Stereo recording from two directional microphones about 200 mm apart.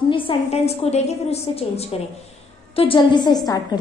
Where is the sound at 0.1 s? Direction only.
25° left (ahead or behind).